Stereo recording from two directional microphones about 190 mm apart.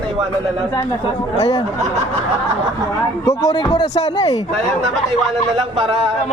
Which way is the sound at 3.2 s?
15° left (ahead or behind).